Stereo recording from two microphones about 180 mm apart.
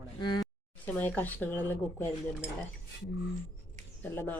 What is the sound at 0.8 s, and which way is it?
Speech, 10° left (ahead or behind).